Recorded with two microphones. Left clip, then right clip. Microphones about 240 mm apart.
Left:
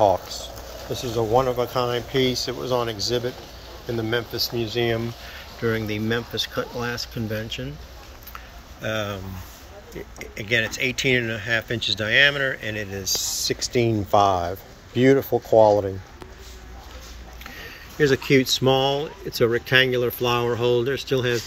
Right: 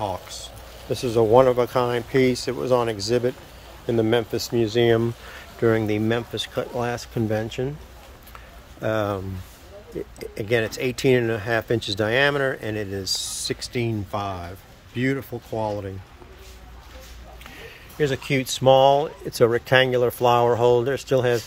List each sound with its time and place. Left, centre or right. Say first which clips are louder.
0.9 s speech: right 5 dB; centre
5.6 s speech: right 4 dB; centre
8.8 s speech: right 3 dB; right; by 15.9 s centre
17.9 s speech: left 5 dB; centre